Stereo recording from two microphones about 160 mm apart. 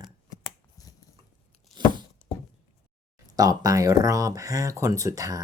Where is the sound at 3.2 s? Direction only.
25° right (ahead or behind).